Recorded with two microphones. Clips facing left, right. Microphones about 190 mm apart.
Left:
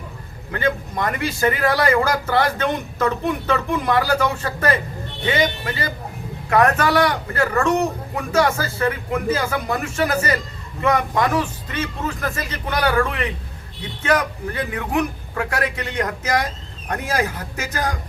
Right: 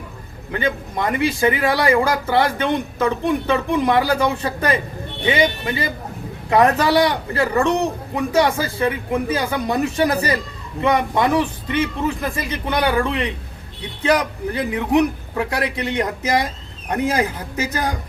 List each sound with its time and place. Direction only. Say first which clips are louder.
0.5 s a man's voice: even; 15° right (ahead or behind)